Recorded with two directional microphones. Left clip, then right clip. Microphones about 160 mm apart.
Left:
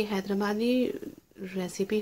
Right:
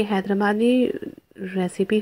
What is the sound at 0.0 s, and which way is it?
Speech, 35° right (ahead or behind).